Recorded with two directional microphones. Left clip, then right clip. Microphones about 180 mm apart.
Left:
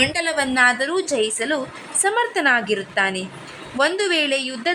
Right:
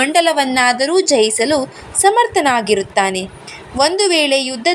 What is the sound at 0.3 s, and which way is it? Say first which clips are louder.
A woman's voice: right 3 dB; 10° right (ahead or behind).